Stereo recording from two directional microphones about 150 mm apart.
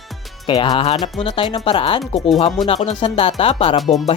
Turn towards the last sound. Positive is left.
turn(degrees=0)  # may be behind; listen again after turning